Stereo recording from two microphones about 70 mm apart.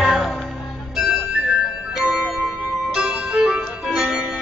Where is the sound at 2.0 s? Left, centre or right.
Centre.